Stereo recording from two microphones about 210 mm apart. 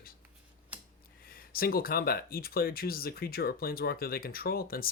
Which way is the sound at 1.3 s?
45° left (ahead or behind).